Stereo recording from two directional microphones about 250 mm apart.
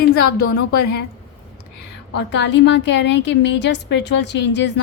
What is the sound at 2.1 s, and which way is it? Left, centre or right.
A woman's voice, left.